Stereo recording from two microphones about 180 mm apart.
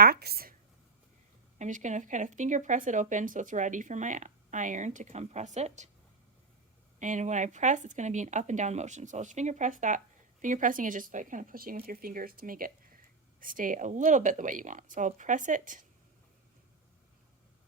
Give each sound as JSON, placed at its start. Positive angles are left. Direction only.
{"t": 0.0, "sound": "speech", "side_deg": -60}
{"t": 1.5, "sound": "speech", "side_deg": -40}
{"t": 7.0, "sound": "speech", "side_deg": -45}